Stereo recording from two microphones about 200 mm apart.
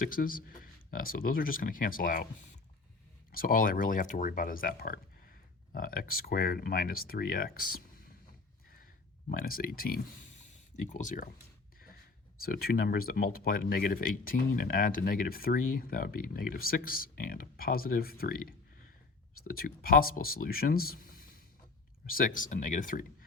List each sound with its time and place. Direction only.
0.0 s speech: 45° left (ahead or behind)
3.3 s speech: 45° left (ahead or behind)
9.3 s speech: 45° left (ahead or behind)
12.4 s speech: 50° left (ahead or behind)